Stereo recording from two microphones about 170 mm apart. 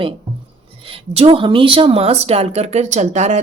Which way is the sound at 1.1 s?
35° right (ahead or behind).